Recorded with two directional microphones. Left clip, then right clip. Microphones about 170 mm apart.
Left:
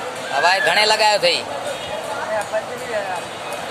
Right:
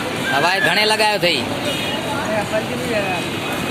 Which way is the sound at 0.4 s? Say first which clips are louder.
Left 2 dB; 5° left (ahead or behind).